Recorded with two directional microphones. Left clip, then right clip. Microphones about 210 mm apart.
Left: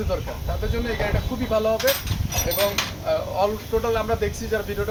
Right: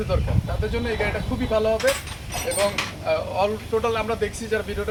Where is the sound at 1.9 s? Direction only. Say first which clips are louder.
Even; 50° left (ahead or behind).